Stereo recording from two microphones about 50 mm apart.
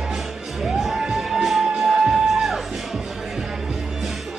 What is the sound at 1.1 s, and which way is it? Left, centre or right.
Music, centre.